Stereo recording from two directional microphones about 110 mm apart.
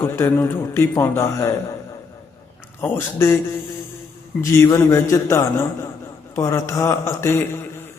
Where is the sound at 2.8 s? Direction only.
20° left (ahead or behind).